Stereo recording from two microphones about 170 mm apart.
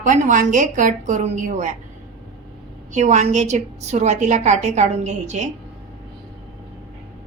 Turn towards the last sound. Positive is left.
turn(degrees=-40)  # may be behind; listen again after turning